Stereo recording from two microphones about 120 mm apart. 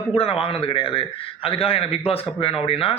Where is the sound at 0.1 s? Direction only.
55° left (ahead or behind).